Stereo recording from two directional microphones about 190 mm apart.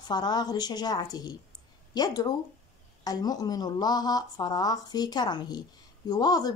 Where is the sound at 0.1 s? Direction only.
20° left (ahead or behind).